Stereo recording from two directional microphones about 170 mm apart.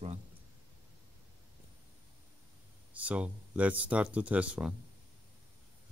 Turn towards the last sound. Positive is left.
turn(degrees=-10)  # may be behind; listen again after turning